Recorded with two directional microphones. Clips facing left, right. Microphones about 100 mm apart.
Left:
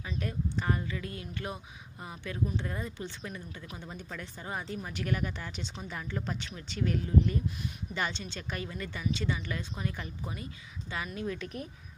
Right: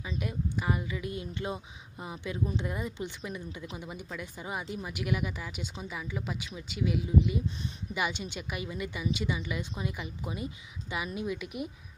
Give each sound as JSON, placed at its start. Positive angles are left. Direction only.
{"t": 0.0, "sound": "speech", "side_deg": -15}